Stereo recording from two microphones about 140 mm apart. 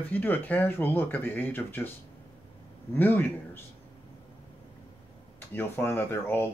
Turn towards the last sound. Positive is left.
turn(degrees=15)  # may be behind; listen again after turning